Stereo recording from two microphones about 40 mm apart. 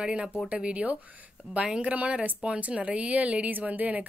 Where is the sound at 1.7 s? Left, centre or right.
Right.